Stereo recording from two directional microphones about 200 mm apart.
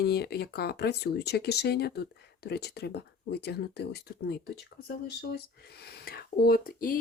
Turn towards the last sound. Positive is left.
turn(degrees=45)  # may be behind; listen again after turning